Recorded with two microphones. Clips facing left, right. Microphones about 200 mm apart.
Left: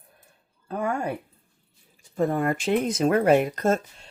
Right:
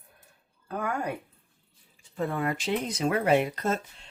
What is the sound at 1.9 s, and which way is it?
Speech, 40° left (ahead or behind).